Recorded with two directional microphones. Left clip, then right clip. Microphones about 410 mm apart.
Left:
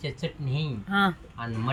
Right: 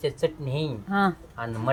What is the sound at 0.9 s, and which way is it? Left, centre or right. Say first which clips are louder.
Speech: even; centre.